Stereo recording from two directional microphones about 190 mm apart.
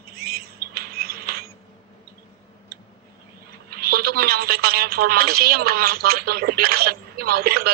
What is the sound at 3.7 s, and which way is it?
A woman's voice, 55° right (ahead or behind).